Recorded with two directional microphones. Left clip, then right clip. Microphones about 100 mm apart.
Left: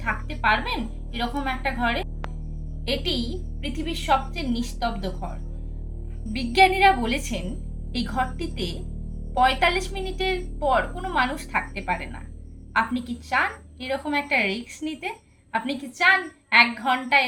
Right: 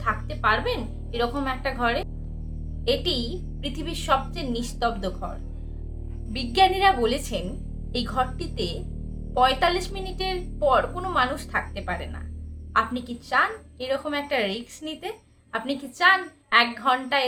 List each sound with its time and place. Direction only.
0.3 s a woman's voice: 40° right (ahead or behind)
6.3 s a woman's voice: 40° right (ahead or behind)